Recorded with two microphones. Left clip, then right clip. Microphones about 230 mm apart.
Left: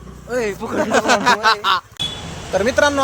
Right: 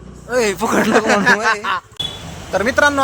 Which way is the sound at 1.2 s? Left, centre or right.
Centre.